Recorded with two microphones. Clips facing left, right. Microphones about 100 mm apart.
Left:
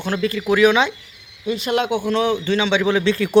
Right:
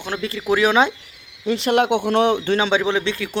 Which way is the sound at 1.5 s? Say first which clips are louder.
Right 3 dB; 65° right (ahead or behind).